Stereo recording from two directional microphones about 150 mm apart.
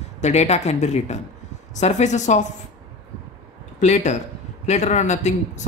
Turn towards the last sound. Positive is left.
turn(degrees=50)  # may be behind; listen again after turning